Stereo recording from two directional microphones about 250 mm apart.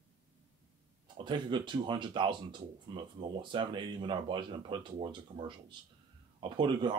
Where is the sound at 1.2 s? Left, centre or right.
Centre.